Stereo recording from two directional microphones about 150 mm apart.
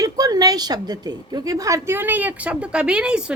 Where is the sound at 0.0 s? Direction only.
25° right (ahead or behind).